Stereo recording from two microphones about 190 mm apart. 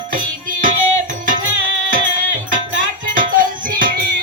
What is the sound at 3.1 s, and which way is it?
Music, 45° right (ahead or behind).